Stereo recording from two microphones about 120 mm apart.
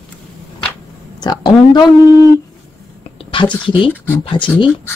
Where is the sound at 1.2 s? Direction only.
35° left (ahead or behind).